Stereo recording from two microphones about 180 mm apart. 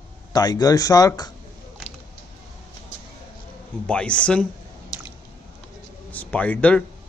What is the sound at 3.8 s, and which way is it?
Speech, 5° left (ahead or behind).